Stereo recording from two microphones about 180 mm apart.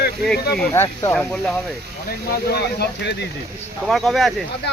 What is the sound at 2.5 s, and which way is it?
Speech, 70° left (ahead or behind).